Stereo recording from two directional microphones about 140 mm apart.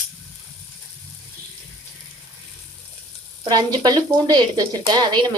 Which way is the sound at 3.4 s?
30° right (ahead or behind).